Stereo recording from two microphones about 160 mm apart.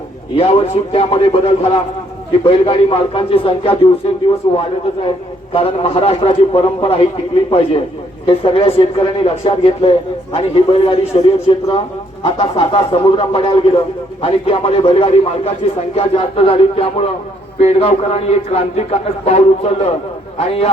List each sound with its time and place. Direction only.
0.3 s a man's voice: 35° left (ahead or behind)
8.3 s a man's voice: 35° left (ahead or behind)